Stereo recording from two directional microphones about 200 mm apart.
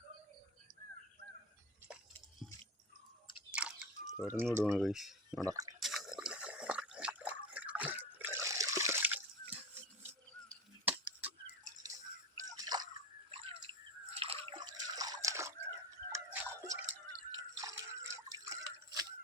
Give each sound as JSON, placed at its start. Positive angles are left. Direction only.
{"t": 3.5, "sound": "drip", "side_deg": -5}
{"t": 4.6, "sound": "speech", "side_deg": 0}
{"t": 5.4, "sound": "speech", "side_deg": -15}
{"t": 5.8, "sound": "drip", "side_deg": 0}
{"t": 10.8, "sound": "chop", "side_deg": -10}
{"t": 12.4, "sound": "drip", "side_deg": -20}